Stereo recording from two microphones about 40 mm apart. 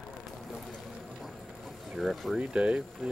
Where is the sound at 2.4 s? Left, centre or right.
Right.